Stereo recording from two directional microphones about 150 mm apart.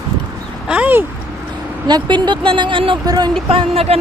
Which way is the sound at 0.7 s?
10° right (ahead or behind).